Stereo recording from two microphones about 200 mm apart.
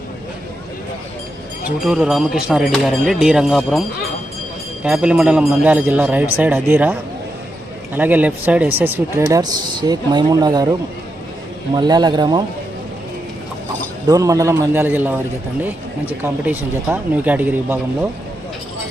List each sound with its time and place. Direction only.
1.8 s speech: 5° right (ahead or behind)
7.9 s speech: 10° right (ahead or behind)
11.7 s speech: 20° right (ahead or behind)
14.1 s speech: 15° right (ahead or behind)
16.2 s speech: 10° right (ahead or behind)